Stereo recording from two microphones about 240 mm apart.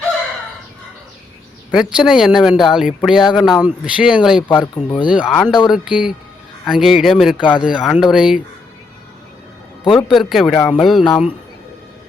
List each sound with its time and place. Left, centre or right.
1.7 s speech: centre
4.5 s speech: centre
5.3 s speech: centre
7.3 s speech: centre
7.6 s speech: centre
9.9 s speech: centre